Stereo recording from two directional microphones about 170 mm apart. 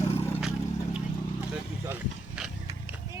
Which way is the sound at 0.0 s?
35° left (ahead or behind).